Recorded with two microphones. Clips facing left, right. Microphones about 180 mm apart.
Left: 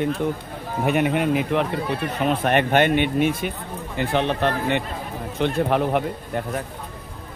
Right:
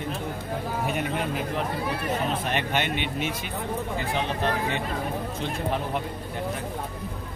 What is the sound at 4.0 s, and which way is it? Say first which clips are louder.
A man's voice: left 10 dB; 65° left (ahead or behind).